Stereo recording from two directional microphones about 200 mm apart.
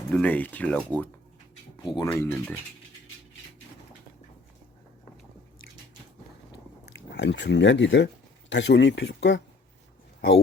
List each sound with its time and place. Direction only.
0.1 s speech: 5° left (ahead or behind)
1.8 s speech: 20° left (ahead or behind)
2.0 s speech: 10° left (ahead or behind)
7.1 s a man's voice: 60° left (ahead or behind)